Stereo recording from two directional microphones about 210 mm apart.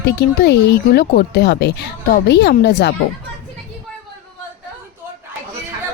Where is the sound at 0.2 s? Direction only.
50° left (ahead or behind).